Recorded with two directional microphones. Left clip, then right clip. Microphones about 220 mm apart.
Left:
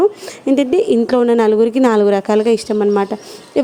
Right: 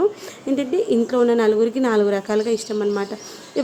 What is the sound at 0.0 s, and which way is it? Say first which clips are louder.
A woman's voice: left 6 dB; 30° left (ahead or behind).